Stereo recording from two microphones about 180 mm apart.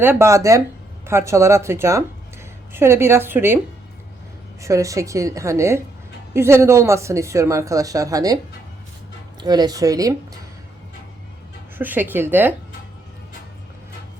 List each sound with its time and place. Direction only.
0.0 s speech: 15° right (ahead or behind)
4.6 s speech: 15° right (ahead or behind)
9.4 s speech: 20° right (ahead or behind)
11.8 s speech: 10° right (ahead or behind)